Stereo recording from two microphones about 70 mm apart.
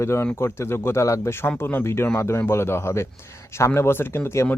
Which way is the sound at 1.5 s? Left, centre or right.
Left.